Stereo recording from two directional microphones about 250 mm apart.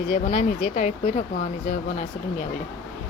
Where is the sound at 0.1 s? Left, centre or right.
Left.